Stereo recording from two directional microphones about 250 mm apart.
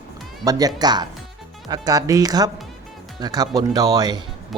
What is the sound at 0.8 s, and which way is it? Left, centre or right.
Speech, centre.